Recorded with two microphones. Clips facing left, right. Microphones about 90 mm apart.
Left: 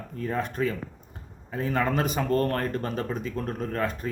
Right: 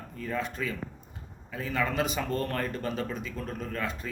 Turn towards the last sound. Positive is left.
turn(degrees=45)  # may be behind; listen again after turning